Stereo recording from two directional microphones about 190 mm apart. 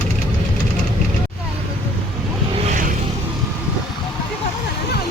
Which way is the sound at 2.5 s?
40° right (ahead or behind).